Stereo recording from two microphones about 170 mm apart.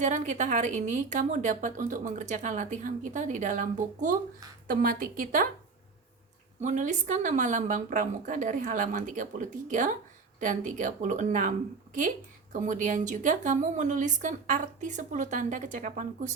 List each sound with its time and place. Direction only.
0.0 s a woman's voice: 45° right (ahead or behind)
6.6 s speech: 45° right (ahead or behind)
12.5 s speech: 50° right (ahead or behind)